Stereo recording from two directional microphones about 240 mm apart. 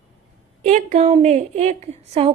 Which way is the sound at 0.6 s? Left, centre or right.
Right.